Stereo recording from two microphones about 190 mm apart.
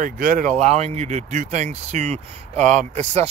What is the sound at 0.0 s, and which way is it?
Speech, 45° right (ahead or behind).